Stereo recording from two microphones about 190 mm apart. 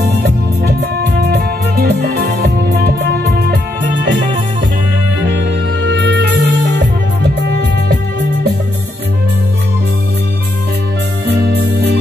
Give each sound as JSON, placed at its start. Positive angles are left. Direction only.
{"t": 1.2, "sound": "music", "side_deg": -55}
{"t": 5.4, "sound": "music", "side_deg": -65}
{"t": 11.2, "sound": "music", "side_deg": -55}